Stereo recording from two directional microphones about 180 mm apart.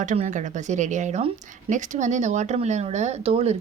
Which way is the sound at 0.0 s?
45° right (ahead or behind).